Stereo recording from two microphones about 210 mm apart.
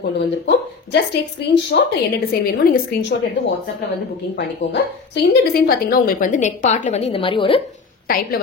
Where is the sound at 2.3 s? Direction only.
45° left (ahead or behind).